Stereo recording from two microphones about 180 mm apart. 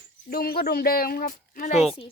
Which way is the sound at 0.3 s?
55° left (ahead or behind).